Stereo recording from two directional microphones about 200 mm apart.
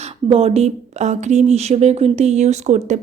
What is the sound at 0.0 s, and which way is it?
Speech, 30° right (ahead or behind).